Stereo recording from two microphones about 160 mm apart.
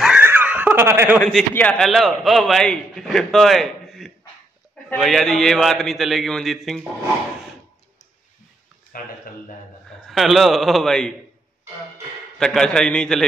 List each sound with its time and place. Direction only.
0.0 s screaming: 10° right (ahead or behind)
1.2 s a man's voice: 10° left (ahead or behind)
8.9 s speech: 65° left (ahead or behind)
10.0 s a man's voice: centre (ahead or behind)
12.4 s a man's voice: 5° left (ahead or behind)